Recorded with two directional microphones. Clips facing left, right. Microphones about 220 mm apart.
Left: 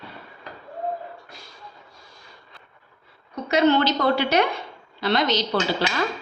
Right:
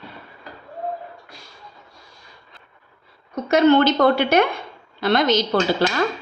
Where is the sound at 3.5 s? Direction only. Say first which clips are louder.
Right 4 dB; 50° right (ahead or behind).